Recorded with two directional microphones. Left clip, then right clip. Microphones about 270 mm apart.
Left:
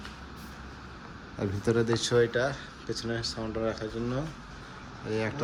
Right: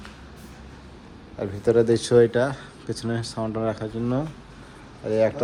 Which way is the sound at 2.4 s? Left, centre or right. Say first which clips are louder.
Right 6 dB; centre.